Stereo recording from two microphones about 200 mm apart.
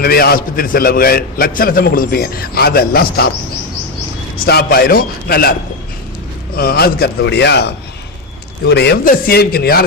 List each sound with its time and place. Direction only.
0.0 s a man's voice: 50° left (ahead or behind)
4.4 s a man's voice: 50° left (ahead or behind)
6.6 s a man's voice: 50° left (ahead or behind)